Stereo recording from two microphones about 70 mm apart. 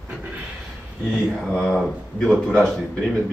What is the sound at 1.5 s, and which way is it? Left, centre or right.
A man's voice, centre.